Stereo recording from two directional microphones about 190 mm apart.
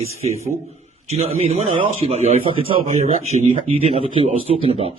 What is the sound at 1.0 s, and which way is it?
A man's voice, 35° right (ahead or behind).